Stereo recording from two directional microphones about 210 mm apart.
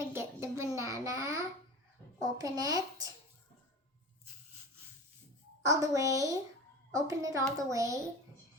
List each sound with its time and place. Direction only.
0.1 s a sound: 15° right (ahead or behind)
2.2 s a child's voice: 15° right (ahead or behind)
5.6 s a woman's voice: 15° right (ahead or behind)